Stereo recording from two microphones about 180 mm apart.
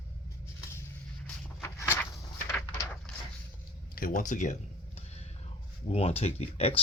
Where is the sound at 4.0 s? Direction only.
50° left (ahead or behind).